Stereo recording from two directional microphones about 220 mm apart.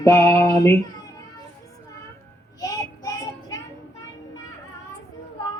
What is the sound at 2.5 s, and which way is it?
Child singing, 15° left (ahead or behind).